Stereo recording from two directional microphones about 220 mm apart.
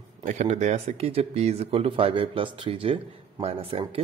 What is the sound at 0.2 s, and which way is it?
Speech, 30° right (ahead or behind).